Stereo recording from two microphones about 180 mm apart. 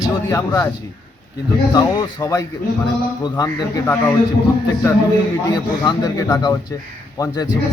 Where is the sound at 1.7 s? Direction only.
20° left (ahead or behind).